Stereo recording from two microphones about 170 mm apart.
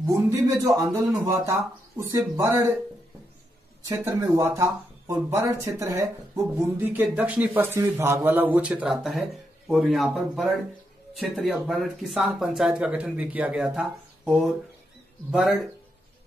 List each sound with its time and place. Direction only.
0.0 s speech: 20° right (ahead or behind)
3.9 s speech: 15° right (ahead or behind)